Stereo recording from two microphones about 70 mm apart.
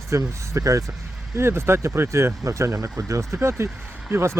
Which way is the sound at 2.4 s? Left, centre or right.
Right.